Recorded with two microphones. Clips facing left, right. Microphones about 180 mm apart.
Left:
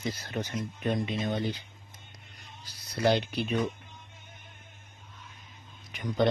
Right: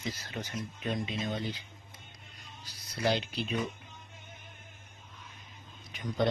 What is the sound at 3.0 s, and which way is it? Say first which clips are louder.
Speech: left 5 dB; 55° left (ahead or behind).